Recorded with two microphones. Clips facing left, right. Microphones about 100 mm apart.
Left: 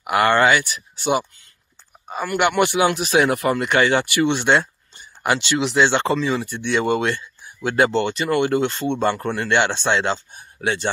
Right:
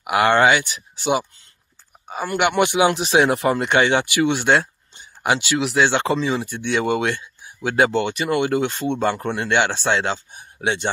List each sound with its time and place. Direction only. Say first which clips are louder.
0.0 s speech: right 1 dB; 10° right (ahead or behind)
2.5 s speech: right 1 dB; 15° right (ahead or behind)
10.3 s speech: even; 20° right (ahead or behind)